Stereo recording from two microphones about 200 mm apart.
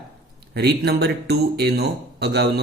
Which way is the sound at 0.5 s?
55° right (ahead or behind).